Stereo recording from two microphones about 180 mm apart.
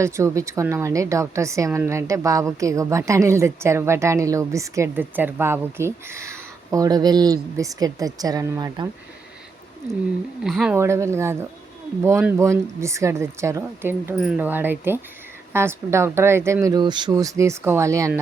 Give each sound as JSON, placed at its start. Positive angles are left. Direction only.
{"t": 0.0, "sound": "a woman's voice", "side_deg": -15}
{"t": 10.4, "sound": "speech", "side_deg": -5}
{"t": 10.8, "sound": "a woman's voice", "side_deg": -15}